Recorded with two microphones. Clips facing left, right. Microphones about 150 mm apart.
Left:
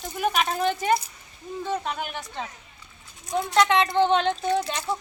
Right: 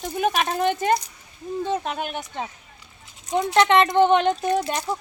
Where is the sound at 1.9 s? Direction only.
55° right (ahead or behind).